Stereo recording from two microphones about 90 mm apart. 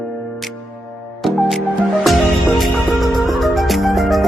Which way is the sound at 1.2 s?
Centre (ahead or behind).